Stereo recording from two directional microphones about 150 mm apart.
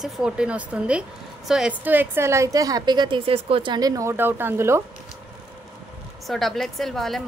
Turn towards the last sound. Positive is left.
turn(degrees=0)  # may be behind; listen again after turning